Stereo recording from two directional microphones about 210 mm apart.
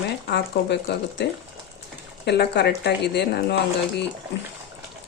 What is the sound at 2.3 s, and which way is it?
Speech, 50° left (ahead or behind).